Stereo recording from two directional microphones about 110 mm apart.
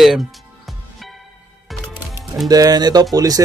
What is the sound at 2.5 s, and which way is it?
Speech, 35° right (ahead or behind).